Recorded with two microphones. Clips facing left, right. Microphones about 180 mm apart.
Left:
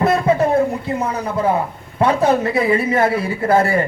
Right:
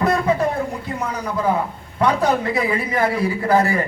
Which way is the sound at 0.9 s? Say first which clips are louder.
Left 1 dB; 25° left (ahead or behind).